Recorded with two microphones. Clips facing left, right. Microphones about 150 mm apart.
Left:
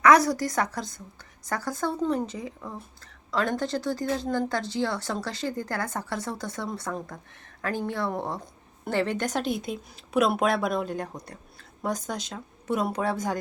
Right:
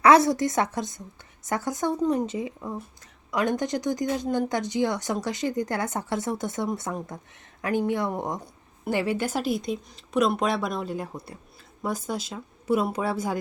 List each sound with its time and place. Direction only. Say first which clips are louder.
0.0 s speech: right 2 dB; 25° right (ahead or behind); by 13.4 s 5° right (ahead or behind)